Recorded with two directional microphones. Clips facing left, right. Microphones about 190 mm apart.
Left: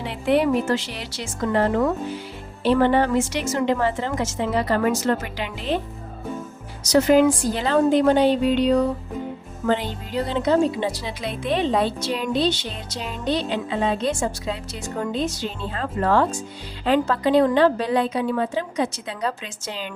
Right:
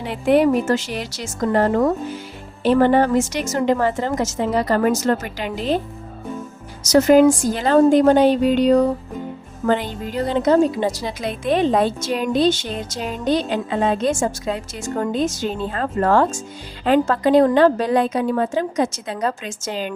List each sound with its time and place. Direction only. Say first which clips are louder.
0.0 s a woman's voice: right 4 dB; 45° right (ahead or behind)
6.8 s a woman's voice: right 4 dB; 45° right (ahead or behind)